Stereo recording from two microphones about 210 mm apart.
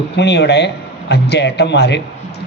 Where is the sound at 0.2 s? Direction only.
55° left (ahead or behind).